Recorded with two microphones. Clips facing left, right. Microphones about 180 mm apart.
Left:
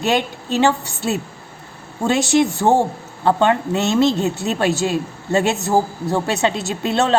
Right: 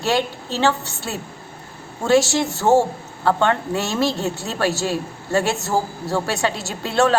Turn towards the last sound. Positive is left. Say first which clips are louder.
# even
turn(degrees=20)  # may be behind; listen again after turning